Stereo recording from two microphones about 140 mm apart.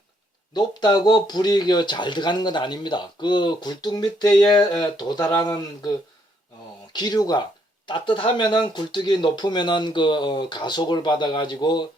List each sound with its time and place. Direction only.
0.5 s speech: 30° left (ahead or behind)
6.9 s speech: 30° left (ahead or behind)